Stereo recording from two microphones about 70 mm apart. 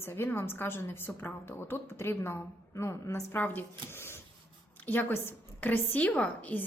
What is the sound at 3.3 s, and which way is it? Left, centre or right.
A woman's voice, left.